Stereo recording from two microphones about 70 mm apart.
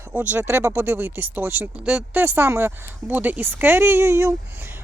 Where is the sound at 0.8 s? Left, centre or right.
Right.